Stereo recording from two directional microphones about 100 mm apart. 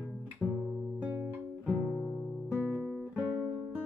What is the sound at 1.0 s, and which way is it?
Music, 20° right (ahead or behind).